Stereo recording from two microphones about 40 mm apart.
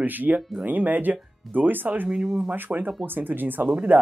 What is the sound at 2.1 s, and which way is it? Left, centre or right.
Speech, right.